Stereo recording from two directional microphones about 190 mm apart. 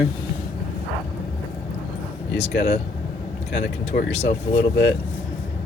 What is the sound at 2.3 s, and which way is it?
Speech, 35° left (ahead or behind).